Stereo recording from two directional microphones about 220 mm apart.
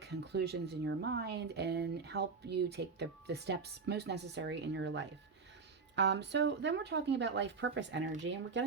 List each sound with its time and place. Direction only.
0.0 s speech: 50° right (ahead or behind)